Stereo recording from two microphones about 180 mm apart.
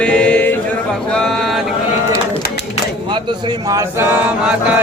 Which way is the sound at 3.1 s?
20° right (ahead or behind).